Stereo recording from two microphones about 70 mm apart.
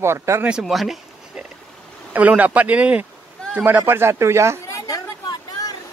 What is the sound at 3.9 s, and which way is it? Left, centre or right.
Speech, right.